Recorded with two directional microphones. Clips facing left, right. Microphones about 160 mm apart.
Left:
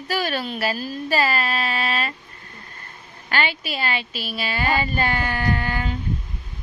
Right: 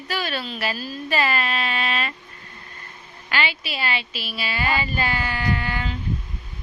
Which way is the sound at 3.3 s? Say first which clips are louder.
Left 2 dB; 45° left (ahead or behind).